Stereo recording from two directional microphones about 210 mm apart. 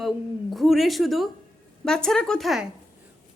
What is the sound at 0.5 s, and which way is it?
A woman's voice, centre (ahead or behind).